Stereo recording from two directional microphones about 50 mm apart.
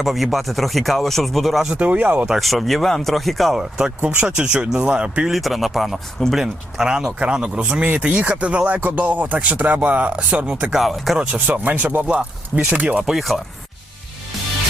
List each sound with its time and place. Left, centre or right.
0.0 s speech: centre
1.7 s speech: right
2.4 s speech: centre
3.6 s speech: centre
5.3 s speech: centre
10.8 s speech: centre
11.3 s speech: right
12.0 s speech: right
13.1 s speech: centre